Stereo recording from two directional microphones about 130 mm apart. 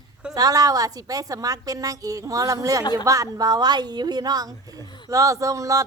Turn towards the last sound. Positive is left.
turn(degrees=-25)  # may be behind; listen again after turning